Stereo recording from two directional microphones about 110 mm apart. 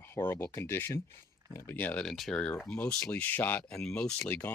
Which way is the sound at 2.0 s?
Centre (ahead or behind).